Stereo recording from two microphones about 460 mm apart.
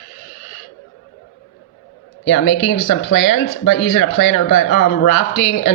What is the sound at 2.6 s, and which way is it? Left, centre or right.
Speech, left.